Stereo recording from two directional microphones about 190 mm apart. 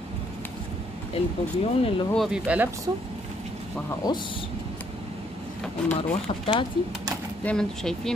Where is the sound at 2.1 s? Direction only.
Centre (ahead or behind).